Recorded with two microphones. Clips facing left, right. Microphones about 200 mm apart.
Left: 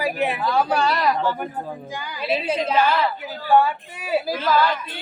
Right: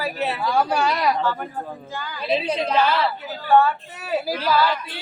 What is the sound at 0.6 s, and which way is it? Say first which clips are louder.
Speech: left 1 dB; 10° right (ahead or behind).